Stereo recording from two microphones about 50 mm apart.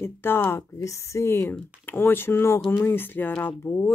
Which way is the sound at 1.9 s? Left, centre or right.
Left.